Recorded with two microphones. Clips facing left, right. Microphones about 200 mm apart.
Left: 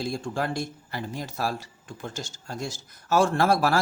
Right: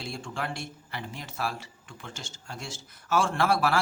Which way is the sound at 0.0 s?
40° left (ahead or behind).